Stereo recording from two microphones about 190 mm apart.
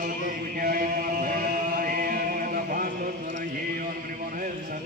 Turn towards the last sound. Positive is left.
turn(degrees=-45)  # may be behind; listen again after turning